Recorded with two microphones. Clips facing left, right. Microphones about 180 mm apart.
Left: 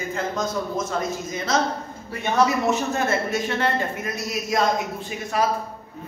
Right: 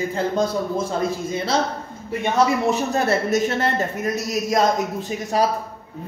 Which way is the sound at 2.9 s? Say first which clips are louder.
Right 4 dB; 40° right (ahead or behind).